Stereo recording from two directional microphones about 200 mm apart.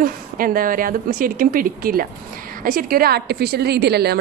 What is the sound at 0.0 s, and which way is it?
A woman's voice, 45° right (ahead or behind).